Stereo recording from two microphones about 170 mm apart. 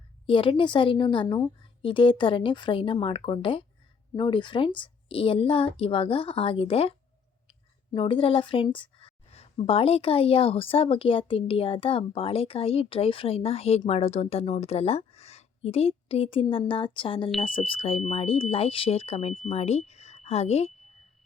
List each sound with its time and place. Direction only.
0.3 s a woman's voice: 30° left (ahead or behind)
7.9 s a woman's voice: 30° left (ahead or behind)